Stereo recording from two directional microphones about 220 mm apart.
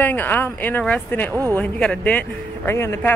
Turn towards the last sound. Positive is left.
turn(degrees=10)  # may be behind; listen again after turning